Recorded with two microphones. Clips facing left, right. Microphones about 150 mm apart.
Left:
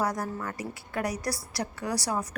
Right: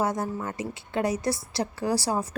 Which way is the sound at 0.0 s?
25° right (ahead or behind).